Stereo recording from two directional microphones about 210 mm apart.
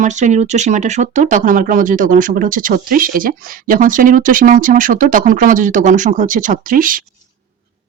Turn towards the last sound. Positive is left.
turn(degrees=-40)  # may be behind; listen again after turning